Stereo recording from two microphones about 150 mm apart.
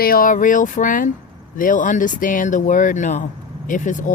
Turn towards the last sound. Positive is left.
turn(degrees=60)  # may be behind; listen again after turning